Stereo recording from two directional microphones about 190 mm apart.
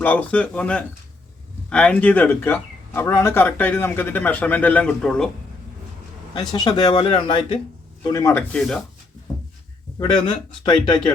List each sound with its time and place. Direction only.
0.0 s speech: 5° left (ahead or behind)
6.3 s speech: 20° left (ahead or behind)
9.3 s a sound: 15° left (ahead or behind)
10.0 s speech: 25° left (ahead or behind)